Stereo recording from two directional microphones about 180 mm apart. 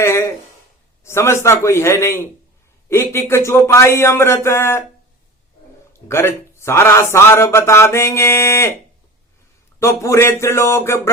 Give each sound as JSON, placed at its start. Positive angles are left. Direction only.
{"t": 0.0, "sound": "a man's voice", "side_deg": 15}
{"t": 6.1, "sound": "a man's voice", "side_deg": 15}
{"t": 9.8, "sound": "a man's voice", "side_deg": 15}